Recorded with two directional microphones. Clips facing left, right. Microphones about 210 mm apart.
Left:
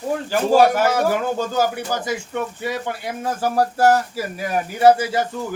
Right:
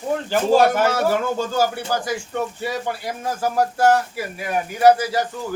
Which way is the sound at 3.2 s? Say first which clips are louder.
Left 1 dB; 30° left (ahead or behind).